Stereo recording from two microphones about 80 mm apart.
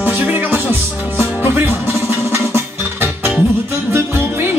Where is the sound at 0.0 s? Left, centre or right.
Right.